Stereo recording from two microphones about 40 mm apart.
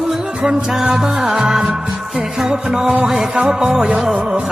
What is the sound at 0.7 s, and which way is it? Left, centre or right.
Music, centre.